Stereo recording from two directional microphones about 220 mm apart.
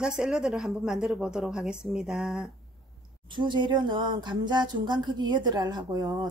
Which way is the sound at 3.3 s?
20° right (ahead or behind).